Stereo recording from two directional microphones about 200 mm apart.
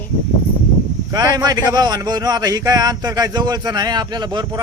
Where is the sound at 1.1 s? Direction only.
20° right (ahead or behind).